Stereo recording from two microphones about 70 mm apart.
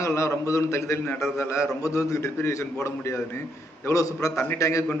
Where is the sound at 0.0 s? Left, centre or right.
Left.